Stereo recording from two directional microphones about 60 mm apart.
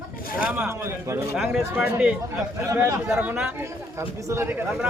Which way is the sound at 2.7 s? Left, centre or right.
Right.